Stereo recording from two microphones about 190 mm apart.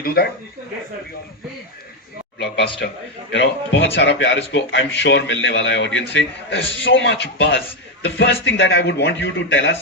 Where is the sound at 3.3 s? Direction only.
70° left (ahead or behind).